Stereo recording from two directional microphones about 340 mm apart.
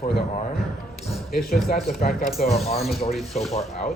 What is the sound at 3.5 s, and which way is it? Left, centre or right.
Speech, left.